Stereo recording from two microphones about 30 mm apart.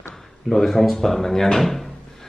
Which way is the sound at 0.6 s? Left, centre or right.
Centre.